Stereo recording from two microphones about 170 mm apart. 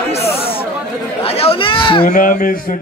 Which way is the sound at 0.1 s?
35° left (ahead or behind).